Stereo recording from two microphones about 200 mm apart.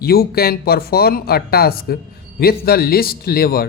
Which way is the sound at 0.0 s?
50° left (ahead or behind).